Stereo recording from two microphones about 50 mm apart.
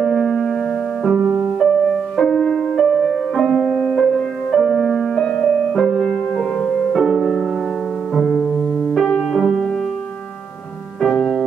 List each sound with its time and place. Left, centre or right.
0.0 s music: centre
1.2 s music: right
1.6 s music: centre
8.2 s music: centre
8.9 s music: centre
11.0 s music: centre